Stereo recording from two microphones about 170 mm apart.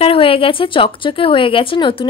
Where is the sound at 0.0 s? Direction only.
30° left (ahead or behind).